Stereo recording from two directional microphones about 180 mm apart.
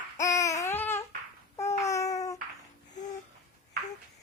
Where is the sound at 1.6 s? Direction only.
15° left (ahead or behind).